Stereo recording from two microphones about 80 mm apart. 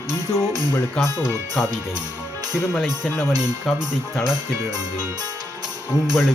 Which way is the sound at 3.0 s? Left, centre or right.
Left.